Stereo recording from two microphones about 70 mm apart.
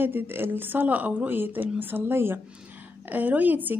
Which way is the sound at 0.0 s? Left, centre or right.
Right.